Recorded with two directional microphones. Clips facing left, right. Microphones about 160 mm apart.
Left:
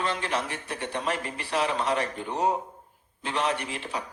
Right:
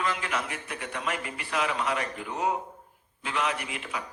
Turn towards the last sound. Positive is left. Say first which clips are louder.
# left 3 dB
turn(degrees=30)  # may be behind; listen again after turning